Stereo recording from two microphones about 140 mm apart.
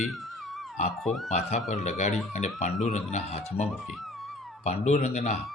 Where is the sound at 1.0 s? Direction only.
Centre (ahead or behind).